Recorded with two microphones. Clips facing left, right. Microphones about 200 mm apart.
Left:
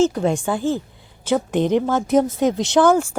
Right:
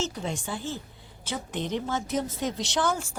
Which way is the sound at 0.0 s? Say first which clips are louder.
Left 14 dB; 50° left (ahead or behind).